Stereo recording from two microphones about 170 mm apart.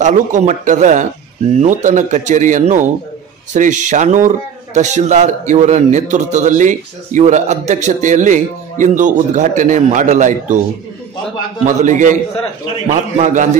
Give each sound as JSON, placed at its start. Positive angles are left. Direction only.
{"t": 0.0, "sound": "a man's voice", "side_deg": -45}
{"t": 11.6, "sound": "a man's voice", "side_deg": -45}